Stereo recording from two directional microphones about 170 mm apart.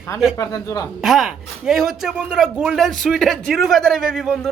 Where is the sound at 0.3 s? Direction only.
20° left (ahead or behind).